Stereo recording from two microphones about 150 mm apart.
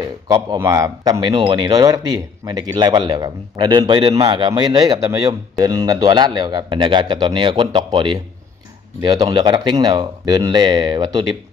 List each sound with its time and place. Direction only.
0.3 s speech: 20° right (ahead or behind)